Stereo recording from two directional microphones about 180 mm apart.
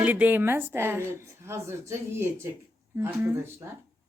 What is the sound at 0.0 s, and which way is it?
A woman's voice, 10° right (ahead or behind).